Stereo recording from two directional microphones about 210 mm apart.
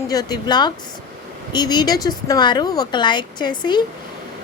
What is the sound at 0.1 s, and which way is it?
A woman's voice, 20° left (ahead or behind).